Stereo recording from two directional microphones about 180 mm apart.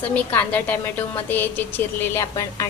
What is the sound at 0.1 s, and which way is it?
A woman's voice, 10° left (ahead or behind).